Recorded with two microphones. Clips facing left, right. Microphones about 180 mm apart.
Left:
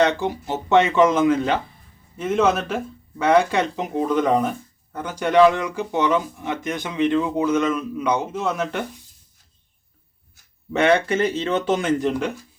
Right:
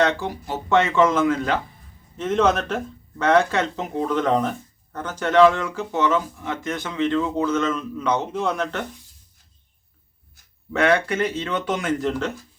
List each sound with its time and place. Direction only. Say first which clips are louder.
0.0 s speech: left 2 dB; 20° left (ahead or behind)
2.1 s speech: even; 10° left (ahead or behind)
10.7 s speech: left 2 dB; 25° left (ahead or behind)